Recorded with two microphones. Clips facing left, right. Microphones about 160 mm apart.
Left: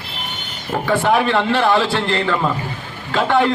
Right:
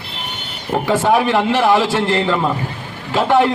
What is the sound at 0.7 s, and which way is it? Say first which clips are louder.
A man's voice: right 2 dB; 20° right (ahead or behind).